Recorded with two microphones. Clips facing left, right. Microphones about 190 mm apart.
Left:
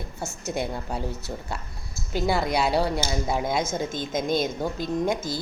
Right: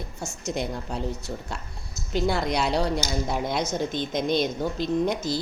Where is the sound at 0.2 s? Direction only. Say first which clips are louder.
Left 1 dB; 60° left (ahead or behind).